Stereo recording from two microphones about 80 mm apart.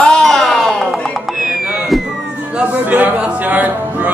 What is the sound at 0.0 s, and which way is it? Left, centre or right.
Music, centre.